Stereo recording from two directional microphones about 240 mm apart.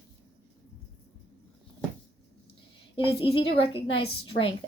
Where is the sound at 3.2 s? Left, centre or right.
Left.